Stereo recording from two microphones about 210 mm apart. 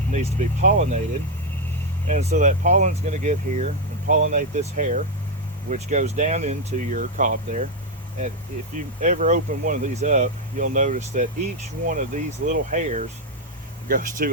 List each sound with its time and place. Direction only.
0.1 s speech: 35° right (ahead or behind)
2.0 s speech: 35° right (ahead or behind)
8.7 s speech: 35° right (ahead or behind)